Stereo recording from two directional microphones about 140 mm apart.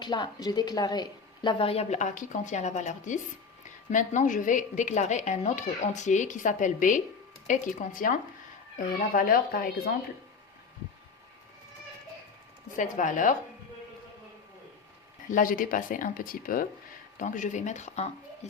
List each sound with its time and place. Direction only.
0.0 s a woman's voice: 30° left (ahead or behind); by 8.2 s 70° left (ahead or behind)
9.1 s speech: 90° left
12.7 s speech: 65° left (ahead or behind)
15.3 s speech: 75° left (ahead or behind)
17.2 s a woman's voice: 65° left (ahead or behind)